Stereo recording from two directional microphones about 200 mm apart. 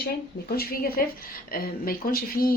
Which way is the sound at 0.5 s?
50° left (ahead or behind).